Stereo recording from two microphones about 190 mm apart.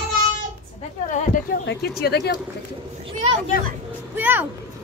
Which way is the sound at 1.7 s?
55° left (ahead or behind).